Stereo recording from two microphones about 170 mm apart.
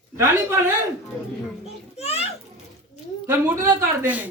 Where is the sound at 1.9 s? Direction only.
40° left (ahead or behind).